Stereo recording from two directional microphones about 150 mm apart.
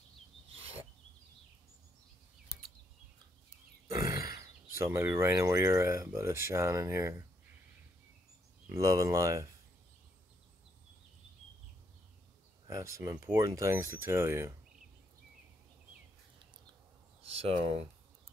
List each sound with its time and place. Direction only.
0.5 s filing: 40° right (ahead or behind)
3.8 s speech: 20° right (ahead or behind)
8.6 s speech: 20° right (ahead or behind)
12.6 s speech: 20° right (ahead or behind)
17.3 s speech: 40° right (ahead or behind)